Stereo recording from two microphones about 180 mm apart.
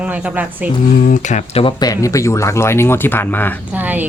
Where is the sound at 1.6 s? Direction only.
20° left (ahead or behind).